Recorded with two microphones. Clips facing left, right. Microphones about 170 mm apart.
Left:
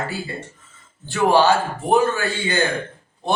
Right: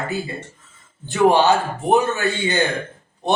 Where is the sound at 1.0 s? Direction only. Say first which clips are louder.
Right 1 dB; 20° right (ahead or behind).